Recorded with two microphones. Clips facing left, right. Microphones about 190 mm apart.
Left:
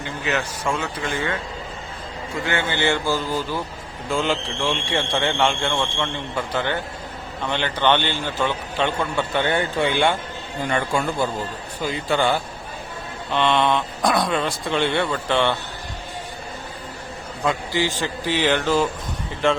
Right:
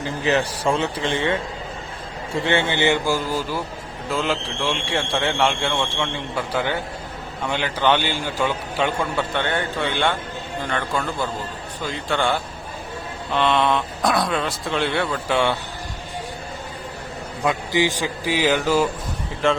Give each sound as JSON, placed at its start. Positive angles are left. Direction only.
{"t": 0.0, "sound": "a man's voice", "side_deg": -35}
{"t": 9.3, "sound": "speech", "side_deg": 10}
{"t": 17.4, "sound": "speech", "side_deg": -15}